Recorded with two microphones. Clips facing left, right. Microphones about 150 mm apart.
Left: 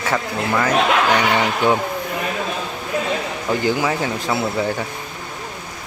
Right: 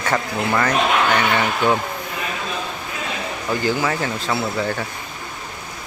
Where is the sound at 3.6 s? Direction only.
15° left (ahead or behind).